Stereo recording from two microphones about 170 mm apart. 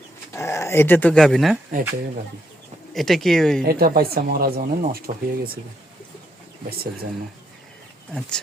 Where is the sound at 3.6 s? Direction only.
60° right (ahead or behind).